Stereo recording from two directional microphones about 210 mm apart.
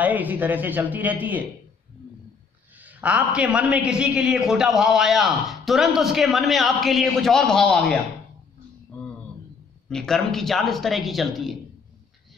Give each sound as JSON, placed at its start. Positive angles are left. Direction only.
{"t": 0.0, "sound": "speech", "side_deg": -10}
{"t": 2.8, "sound": "a man's voice", "side_deg": -5}
{"t": 8.9, "sound": "a sound", "side_deg": 5}
{"t": 9.8, "sound": "a man's voice", "side_deg": 0}